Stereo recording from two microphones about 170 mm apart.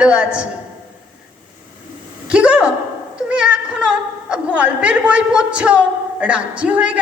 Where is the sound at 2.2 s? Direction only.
5° right (ahead or behind).